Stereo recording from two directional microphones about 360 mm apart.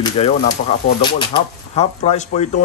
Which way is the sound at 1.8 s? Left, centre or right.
Centre.